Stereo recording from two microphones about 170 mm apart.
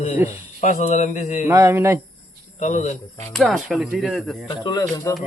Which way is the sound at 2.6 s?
45° left (ahead or behind).